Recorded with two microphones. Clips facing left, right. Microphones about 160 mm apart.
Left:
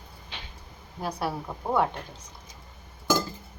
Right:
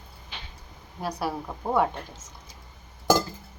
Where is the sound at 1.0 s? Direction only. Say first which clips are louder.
Right 1 dB; centre (ahead or behind).